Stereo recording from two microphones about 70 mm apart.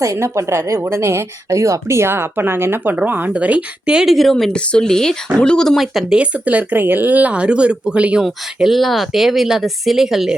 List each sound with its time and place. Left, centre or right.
0.0 s speech: right
2.9 s speech: right
4.1 s speech: centre
5.7 s speech: centre
6.1 s speech: centre